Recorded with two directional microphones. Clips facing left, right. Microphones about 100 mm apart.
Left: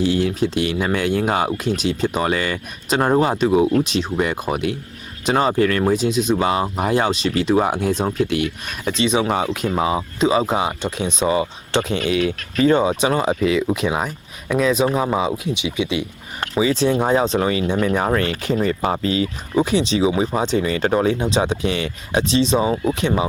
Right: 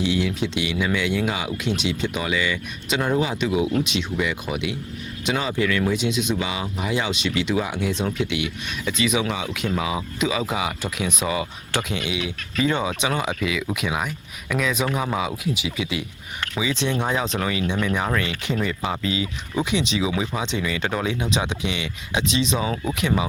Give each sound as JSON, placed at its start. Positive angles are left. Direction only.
{"t": 0.0, "sound": "speech", "side_deg": 40}
{"t": 9.3, "sound": "speech", "side_deg": 45}
{"t": 12.1, "sound": "speech", "side_deg": 45}
{"t": 16.4, "sound": "speech", "side_deg": 40}